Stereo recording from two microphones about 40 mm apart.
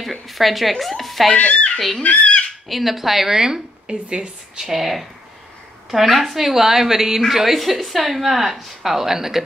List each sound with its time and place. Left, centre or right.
0.0 s a sound: centre
1.3 s speech: left
2.7 s a woman's voice: centre
4.7 s a woman's voice: centre